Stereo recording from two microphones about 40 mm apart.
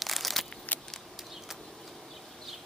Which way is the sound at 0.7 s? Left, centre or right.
Left.